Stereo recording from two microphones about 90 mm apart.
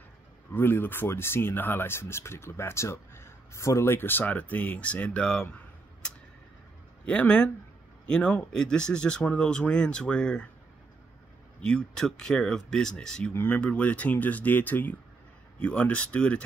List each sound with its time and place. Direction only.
0.5 s speech: 25° left (ahead or behind)
7.1 s speech: 10° left (ahead or behind)
11.6 s speech: 10° left (ahead or behind)